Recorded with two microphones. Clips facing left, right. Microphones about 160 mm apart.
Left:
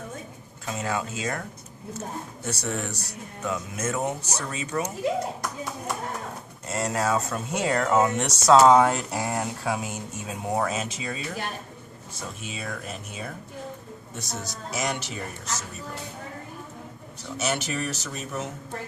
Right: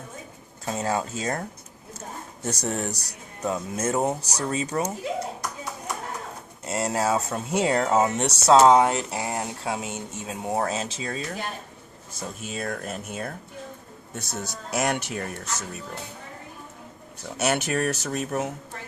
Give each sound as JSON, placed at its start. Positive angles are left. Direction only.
{"t": 0.6, "sound": "speech", "side_deg": -35}
{"t": 6.7, "sound": "speech", "side_deg": -25}
{"t": 12.4, "sound": "speech", "side_deg": -45}
{"t": 14.2, "sound": "speech", "side_deg": -55}
{"t": 17.3, "sound": "speech", "side_deg": -60}